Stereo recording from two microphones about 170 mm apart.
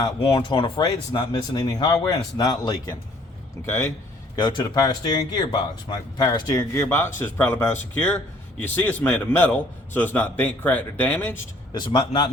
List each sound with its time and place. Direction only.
0.2 s speech: 30° left (ahead or behind)
4.4 s a man's voice: 25° left (ahead or behind); by 11.3 s 10° left (ahead or behind)
11.7 s speech: 30° left (ahead or behind)